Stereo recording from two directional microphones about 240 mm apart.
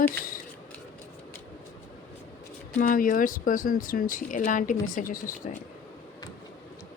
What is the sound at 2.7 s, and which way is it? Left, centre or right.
Speech, left.